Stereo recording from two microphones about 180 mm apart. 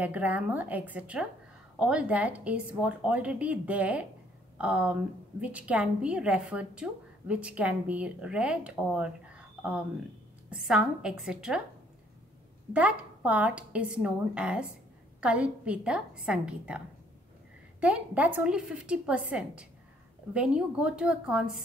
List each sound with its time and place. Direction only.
0.0 s a woman's voice: 10° right (ahead or behind)
12.7 s a woman's voice: 5° right (ahead or behind)